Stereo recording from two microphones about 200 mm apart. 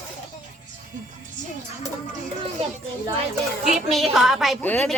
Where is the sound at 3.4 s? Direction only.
Centre (ahead or behind).